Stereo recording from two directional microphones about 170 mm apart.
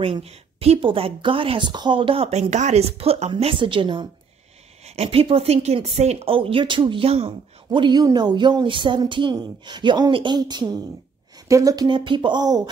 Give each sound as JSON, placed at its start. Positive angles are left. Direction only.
{"t": 0.0, "sound": "speech", "side_deg": -35}